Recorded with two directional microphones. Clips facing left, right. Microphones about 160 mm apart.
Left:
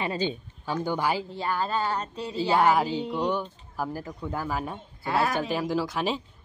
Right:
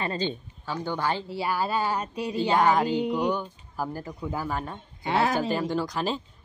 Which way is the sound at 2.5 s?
5° left (ahead or behind).